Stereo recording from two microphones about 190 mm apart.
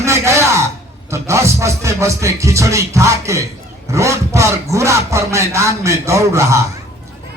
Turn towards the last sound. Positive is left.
turn(degrees=-15)  # may be behind; listen again after turning